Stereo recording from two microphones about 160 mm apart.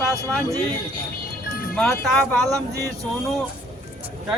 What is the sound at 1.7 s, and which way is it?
Speech, 5° left (ahead or behind).